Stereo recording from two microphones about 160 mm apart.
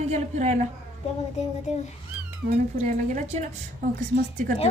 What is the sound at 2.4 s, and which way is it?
A woman's voice, 55° right (ahead or behind).